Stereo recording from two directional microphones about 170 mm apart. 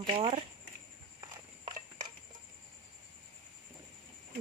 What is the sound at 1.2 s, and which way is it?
Horse, 25° right (ahead or behind).